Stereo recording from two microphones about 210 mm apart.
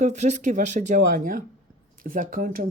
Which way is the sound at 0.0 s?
35° right (ahead or behind).